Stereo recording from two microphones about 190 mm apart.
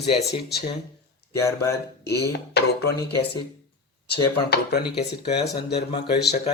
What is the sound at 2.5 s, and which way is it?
Speech, 60° left (ahead or behind).